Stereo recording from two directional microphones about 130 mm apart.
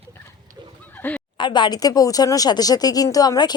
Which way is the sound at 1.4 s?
35° left (ahead or behind).